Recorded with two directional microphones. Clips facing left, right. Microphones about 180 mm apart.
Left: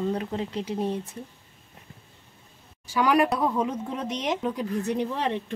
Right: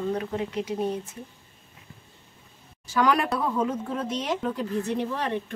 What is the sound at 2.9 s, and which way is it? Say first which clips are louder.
Speech: left 1 dB; 10° left (ahead or behind).